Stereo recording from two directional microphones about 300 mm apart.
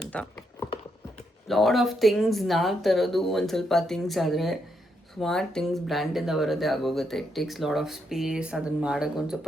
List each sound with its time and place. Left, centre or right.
0.1 s speech: centre
1.5 s speech: centre